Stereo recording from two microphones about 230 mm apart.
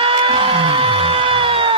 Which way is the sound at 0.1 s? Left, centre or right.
Right.